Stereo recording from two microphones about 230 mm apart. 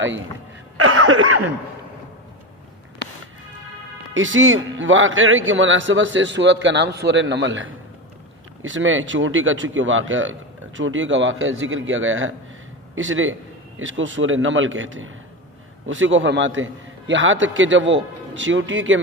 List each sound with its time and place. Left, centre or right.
0.8 s cough: right
4.1 s a man's voice: right